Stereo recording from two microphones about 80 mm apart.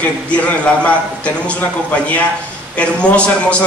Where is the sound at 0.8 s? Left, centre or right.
Centre.